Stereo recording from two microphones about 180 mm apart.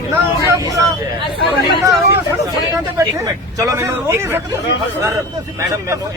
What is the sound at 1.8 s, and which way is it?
Speech, 20° right (ahead or behind).